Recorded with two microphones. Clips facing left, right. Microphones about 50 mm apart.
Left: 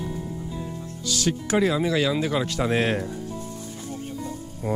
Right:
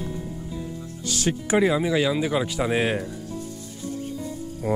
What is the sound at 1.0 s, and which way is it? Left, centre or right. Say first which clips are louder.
Speech: even; right.